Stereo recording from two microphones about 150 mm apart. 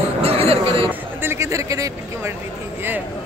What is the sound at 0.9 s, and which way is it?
Speech, 15° right (ahead or behind).